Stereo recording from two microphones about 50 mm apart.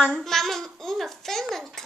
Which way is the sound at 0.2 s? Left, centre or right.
Centre.